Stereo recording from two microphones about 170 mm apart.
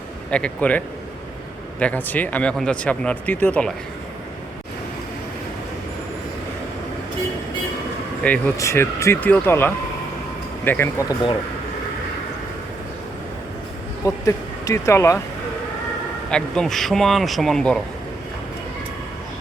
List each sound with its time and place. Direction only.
0.3 s speech: 5° left (ahead or behind)
1.8 s speech: 10° left (ahead or behind)
8.2 s speech: 15° left (ahead or behind)
14.0 s speech: 20° left (ahead or behind)
16.3 s speech: 5° left (ahead or behind)